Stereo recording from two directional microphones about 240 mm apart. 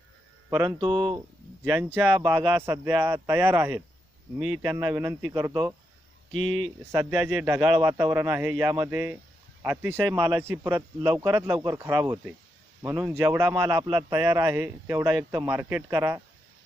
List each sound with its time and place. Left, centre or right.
0.5 s a man's voice: centre
1.6 s a man's voice: centre
6.3 s speech: centre
6.9 s a man's voice: centre